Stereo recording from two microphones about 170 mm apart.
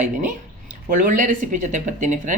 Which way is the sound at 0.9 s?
50° right (ahead or behind).